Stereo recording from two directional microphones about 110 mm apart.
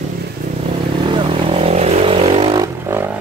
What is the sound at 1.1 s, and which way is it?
Vehicle, 55° right (ahead or behind).